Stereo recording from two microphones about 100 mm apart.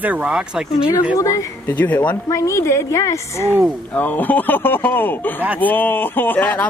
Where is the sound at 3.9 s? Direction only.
15° left (ahead or behind).